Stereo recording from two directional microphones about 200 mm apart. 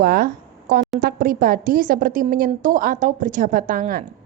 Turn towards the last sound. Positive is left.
turn(degrees=-45)  # may be behind; listen again after turning